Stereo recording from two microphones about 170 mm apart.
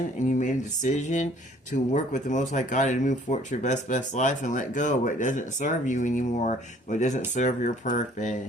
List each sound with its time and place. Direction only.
0.2 s speech: 45° left (ahead or behind)